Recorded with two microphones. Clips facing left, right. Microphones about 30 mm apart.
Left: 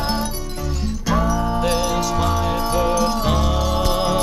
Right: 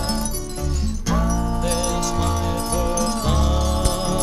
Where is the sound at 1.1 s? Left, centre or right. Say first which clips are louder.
Left 3 dB; centre.